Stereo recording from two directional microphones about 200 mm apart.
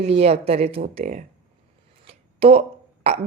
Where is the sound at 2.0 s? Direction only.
30° right (ahead or behind).